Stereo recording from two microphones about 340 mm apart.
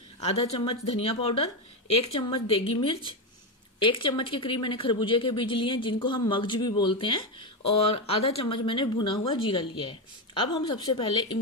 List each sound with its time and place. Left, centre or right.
0.2 s a woman's voice: centre